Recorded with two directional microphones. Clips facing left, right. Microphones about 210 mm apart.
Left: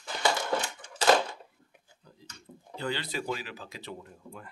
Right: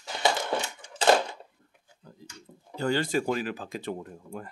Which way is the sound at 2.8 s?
45° right (ahead or behind).